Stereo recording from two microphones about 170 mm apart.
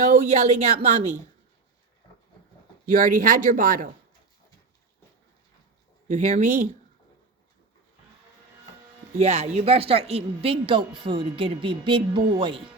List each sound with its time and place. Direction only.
0.0 s speech: 40° right (ahead or behind)
2.8 s speech: 50° right (ahead or behind)
6.1 s speech: 45° right (ahead or behind)
9.1 s speech: 40° right (ahead or behind)